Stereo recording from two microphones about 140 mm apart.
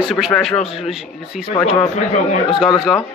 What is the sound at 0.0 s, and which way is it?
Speech, centre (ahead or behind).